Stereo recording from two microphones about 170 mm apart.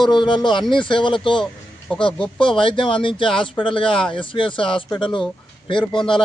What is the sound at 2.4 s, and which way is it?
Speech, 30° left (ahead or behind).